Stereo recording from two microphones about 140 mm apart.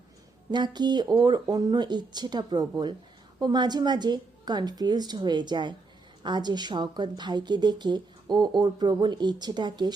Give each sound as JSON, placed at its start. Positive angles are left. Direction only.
{"t": 0.5, "sound": "speech", "side_deg": -30}